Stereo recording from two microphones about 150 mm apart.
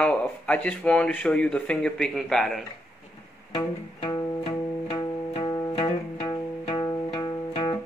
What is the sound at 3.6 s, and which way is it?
Music, 35° left (ahead or behind).